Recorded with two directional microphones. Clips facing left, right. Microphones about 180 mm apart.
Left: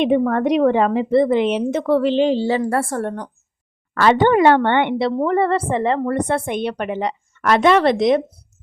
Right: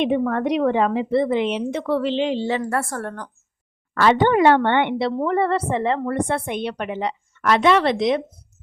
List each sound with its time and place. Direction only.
0.0 s a woman's voice: 45° left (ahead or behind); by 3.2 s 25° left (ahead or behind)
3.9 s a woman's voice: 45° left (ahead or behind)